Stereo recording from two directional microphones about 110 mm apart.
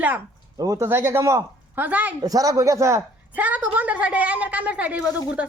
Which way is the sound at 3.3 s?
15° right (ahead or behind).